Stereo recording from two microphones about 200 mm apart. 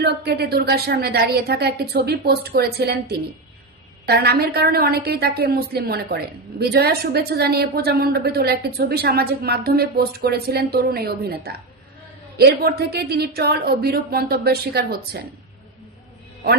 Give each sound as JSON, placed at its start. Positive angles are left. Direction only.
{"t": 0.0, "sound": "a woman's voice", "side_deg": -50}